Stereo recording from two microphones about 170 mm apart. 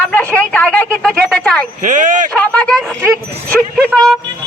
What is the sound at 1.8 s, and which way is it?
Speech, 50° right (ahead or behind).